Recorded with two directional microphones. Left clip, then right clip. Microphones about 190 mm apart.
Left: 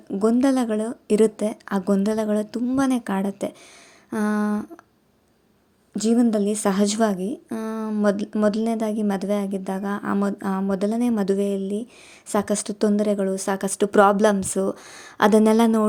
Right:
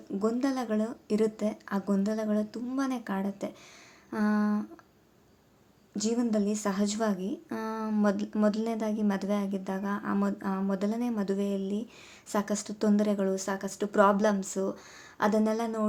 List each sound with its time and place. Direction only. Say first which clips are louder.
0.1 s speech: left 10 dB; 40° left (ahead or behind)
6.0 s a woman's voice: left 9 dB; 35° left (ahead or behind)
13.6 s a woman's voice: left 8 dB; 45° left (ahead or behind)